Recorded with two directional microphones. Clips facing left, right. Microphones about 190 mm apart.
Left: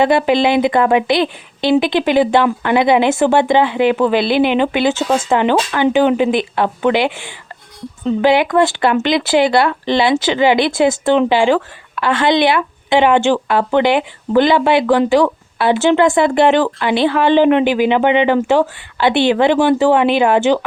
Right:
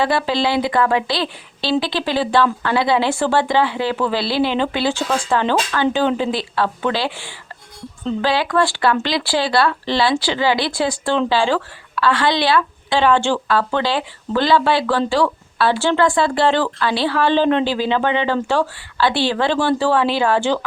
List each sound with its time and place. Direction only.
0.0 s speech: 20° left (ahead or behind)